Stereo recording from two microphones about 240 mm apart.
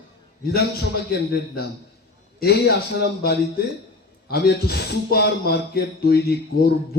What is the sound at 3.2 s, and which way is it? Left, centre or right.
Speech, left.